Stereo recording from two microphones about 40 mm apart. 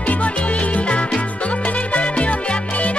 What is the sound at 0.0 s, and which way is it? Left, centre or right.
Music, left.